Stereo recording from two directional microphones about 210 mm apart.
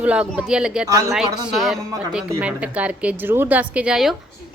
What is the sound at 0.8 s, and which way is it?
Speech, 15° right (ahead or behind).